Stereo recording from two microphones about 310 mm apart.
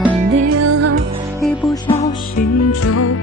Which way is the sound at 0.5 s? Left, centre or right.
Right.